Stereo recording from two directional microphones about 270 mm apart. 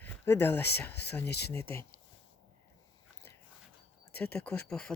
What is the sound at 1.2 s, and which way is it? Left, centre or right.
Speech, left.